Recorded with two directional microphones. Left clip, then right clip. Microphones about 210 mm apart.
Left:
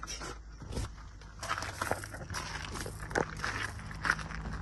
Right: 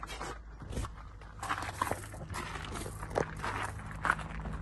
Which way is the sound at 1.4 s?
Centre (ahead or behind).